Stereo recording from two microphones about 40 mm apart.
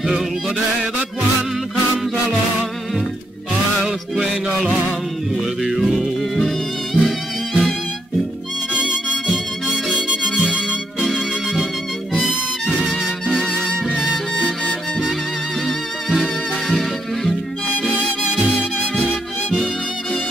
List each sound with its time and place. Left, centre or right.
3.8 s music: centre
5.6 s music: centre
11.1 s music: centre
13.3 s music: centre
15.6 s music: centre
17.8 s music: centre